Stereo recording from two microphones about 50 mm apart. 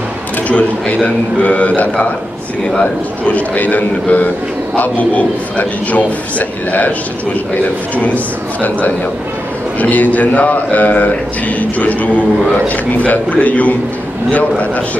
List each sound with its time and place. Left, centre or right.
0.5 s a man's voice: left
7.9 s speech: left